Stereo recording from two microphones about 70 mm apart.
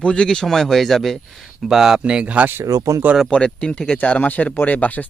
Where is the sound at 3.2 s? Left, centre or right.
Centre.